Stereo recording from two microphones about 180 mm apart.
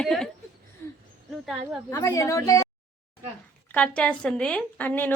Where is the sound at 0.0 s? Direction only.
5° left (ahead or behind).